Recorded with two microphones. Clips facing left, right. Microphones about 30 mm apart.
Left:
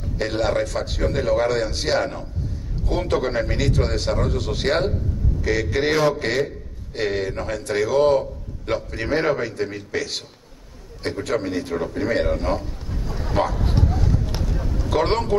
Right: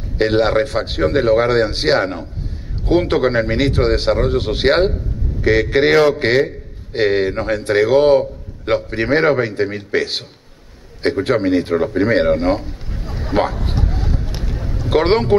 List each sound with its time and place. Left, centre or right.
0.2 s a man's voice: right